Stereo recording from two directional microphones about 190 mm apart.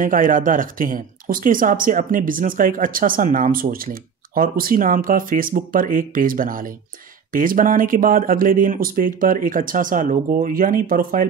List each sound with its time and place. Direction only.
0.0 s speech: 45° right (ahead or behind)